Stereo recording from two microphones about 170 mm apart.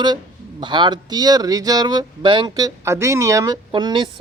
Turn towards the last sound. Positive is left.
turn(degrees=-25)  # may be behind; listen again after turning